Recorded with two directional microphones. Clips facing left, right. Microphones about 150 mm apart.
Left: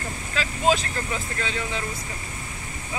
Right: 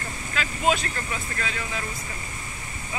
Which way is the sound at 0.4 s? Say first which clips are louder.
Left 2 dB; 30° left (ahead or behind).